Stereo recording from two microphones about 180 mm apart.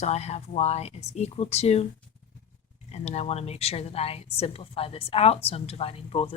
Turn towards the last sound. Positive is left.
turn(degrees=35)  # may be behind; listen again after turning